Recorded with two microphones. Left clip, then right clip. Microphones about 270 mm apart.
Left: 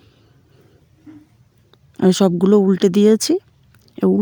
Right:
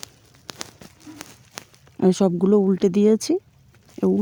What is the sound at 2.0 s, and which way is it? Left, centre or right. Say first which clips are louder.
Speech: left 4 dB; left.